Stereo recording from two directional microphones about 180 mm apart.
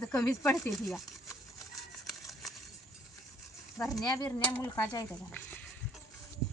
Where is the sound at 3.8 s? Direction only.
15° left (ahead or behind).